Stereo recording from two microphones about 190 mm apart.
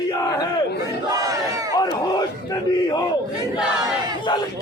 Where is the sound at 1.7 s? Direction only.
20° left (ahead or behind).